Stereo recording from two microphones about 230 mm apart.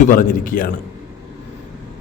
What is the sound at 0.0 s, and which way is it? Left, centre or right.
Speech, left.